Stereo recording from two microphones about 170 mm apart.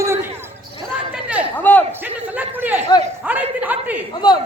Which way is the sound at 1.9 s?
10° right (ahead or behind).